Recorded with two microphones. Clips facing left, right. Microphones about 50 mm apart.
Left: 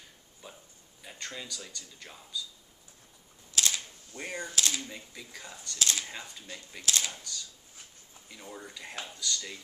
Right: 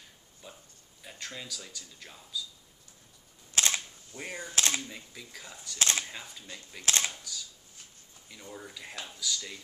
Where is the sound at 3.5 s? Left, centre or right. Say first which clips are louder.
Right 2 dB; right.